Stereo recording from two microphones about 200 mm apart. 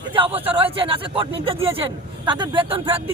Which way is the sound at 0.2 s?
30° right (ahead or behind).